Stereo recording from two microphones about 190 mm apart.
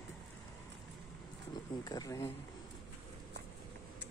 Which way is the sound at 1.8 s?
20° left (ahead or behind).